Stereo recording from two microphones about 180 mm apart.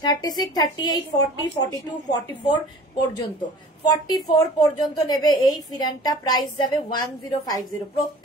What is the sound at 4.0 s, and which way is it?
A woman's voice, 20° left (ahead or behind).